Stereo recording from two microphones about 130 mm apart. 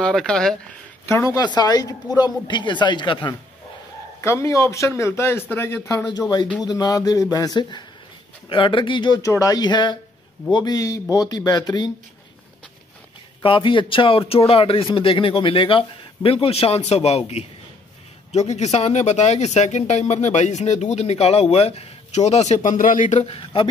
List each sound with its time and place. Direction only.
0.0 s speech: 5° left (ahead or behind)
1.0 s speech: 25° left (ahead or behind)
4.2 s a man's voice: 20° left (ahead or behind)
6.1 s a man's voice: 30° left (ahead or behind)
9.2 s speech: 25° left (ahead or behind)
13.4 s a man's voice: 40° left (ahead or behind)